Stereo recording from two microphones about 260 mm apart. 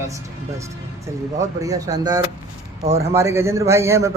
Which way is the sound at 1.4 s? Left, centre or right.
Centre.